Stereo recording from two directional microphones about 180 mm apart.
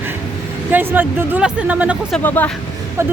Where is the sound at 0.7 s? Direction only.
10° right (ahead or behind).